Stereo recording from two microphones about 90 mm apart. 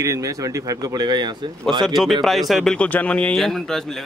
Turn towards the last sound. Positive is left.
turn(degrees=5)  # may be behind; listen again after turning